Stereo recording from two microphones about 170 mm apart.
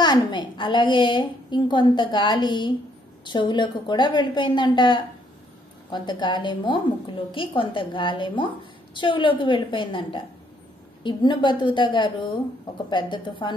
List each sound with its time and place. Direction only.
0.0 s a woman's voice: 25° left (ahead or behind)